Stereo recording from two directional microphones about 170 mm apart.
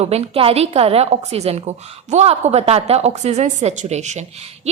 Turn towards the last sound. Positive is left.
turn(degrees=-40)  # may be behind; listen again after turning